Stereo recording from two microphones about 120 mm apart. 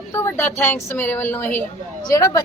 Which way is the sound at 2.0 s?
30° left (ahead or behind).